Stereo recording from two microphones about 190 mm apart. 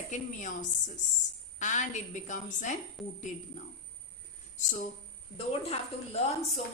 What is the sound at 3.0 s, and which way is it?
Speech, centre (ahead or behind).